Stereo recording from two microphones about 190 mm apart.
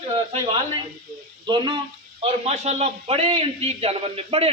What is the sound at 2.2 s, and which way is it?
A man's voice, 35° right (ahead or behind).